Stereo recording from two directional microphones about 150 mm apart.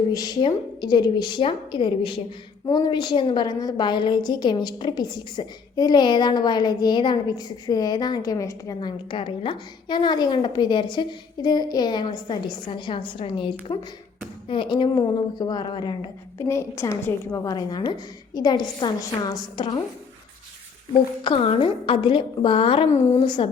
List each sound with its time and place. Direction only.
0.1 s a woman's voice: 25° left (ahead or behind)
16.5 s a woman's voice: 20° left (ahead or behind)
21.2 s a woman's voice: 35° left (ahead or behind)
23.2 s a woman's voice: 30° left (ahead or behind)